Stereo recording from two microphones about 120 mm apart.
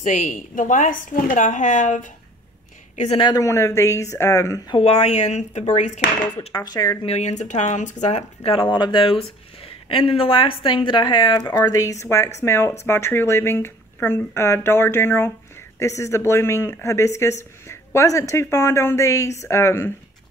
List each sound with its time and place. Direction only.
0.0 s a woman's voice: 90° left
3.1 s speech: 45° left (ahead or behind)
3.3 s speech: 25° left (ahead or behind)
4.7 s speech: 60° left (ahead or behind); by 5.9 s 75° left (ahead or behind)
6.3 s speech: 35° left (ahead or behind)
7.1 s speech: 70° left (ahead or behind)
8.4 s speech: 45° left (ahead or behind)
11.6 s speech: 25° left (ahead or behind)